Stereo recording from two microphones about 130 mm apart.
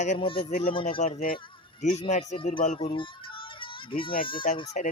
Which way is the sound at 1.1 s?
80° left.